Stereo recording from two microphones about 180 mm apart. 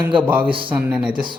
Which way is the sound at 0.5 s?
30° right (ahead or behind).